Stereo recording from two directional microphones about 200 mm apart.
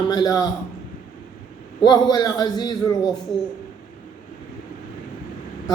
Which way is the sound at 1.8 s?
20° left (ahead or behind).